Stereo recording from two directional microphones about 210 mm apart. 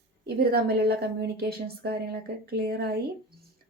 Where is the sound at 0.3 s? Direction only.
50° right (ahead or behind).